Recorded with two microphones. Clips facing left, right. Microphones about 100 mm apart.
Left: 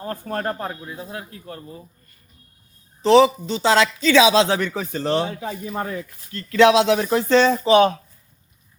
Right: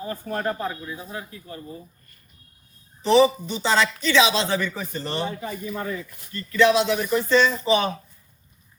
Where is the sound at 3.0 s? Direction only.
90° left.